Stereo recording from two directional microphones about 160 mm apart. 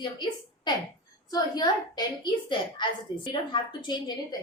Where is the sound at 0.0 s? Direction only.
30° left (ahead or behind).